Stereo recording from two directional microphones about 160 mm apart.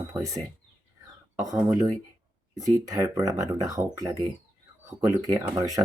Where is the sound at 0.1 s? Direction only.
20° right (ahead or behind).